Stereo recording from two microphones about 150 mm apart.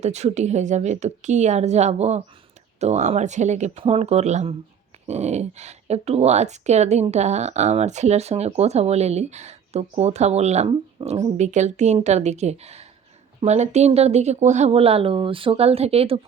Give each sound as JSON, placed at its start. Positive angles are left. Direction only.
{"t": 0.0, "sound": "speech", "side_deg": -45}